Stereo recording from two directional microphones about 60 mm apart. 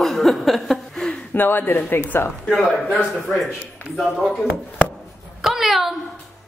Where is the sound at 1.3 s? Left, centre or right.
Left.